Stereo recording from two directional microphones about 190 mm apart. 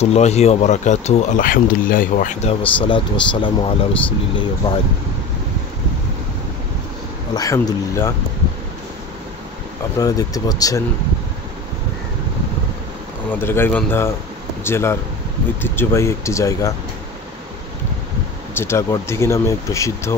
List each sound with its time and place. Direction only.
0.0 s speech: 35° left (ahead or behind)
2.6 s speech: 25° left (ahead or behind)
7.3 s speech: 15° left (ahead or behind)
9.9 s speech: 20° left (ahead or behind)
13.3 s speech: 10° left (ahead or behind)
18.6 s speech: 15° left (ahead or behind)